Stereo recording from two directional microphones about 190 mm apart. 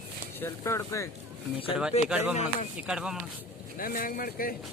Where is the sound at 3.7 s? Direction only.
50° left (ahead or behind).